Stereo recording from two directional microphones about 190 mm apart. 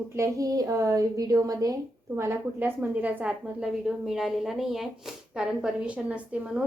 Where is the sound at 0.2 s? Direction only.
20° right (ahead or behind).